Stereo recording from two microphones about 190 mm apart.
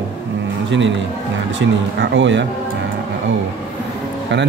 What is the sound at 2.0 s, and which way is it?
Speech, 75° right (ahead or behind).